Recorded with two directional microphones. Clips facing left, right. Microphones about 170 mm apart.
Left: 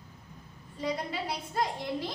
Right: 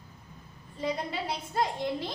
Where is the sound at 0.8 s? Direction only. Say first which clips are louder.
Right 1 dB; 25° right (ahead or behind).